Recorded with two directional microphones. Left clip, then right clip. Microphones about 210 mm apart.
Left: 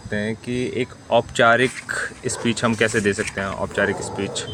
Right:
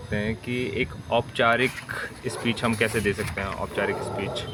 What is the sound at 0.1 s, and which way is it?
Speech, 25° left (ahead or behind).